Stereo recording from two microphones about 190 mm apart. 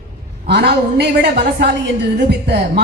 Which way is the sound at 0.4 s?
60° right (ahead or behind).